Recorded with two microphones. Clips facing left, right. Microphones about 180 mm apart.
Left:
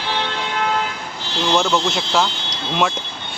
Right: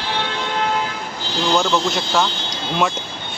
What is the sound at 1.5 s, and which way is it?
Speech, centre (ahead or behind).